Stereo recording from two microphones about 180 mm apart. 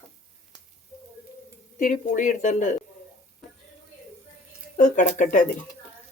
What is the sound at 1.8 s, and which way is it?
Cutlery, 45° left (ahead or behind).